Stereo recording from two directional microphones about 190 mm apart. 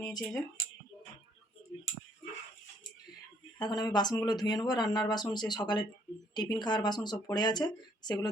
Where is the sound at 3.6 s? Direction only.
20° left (ahead or behind).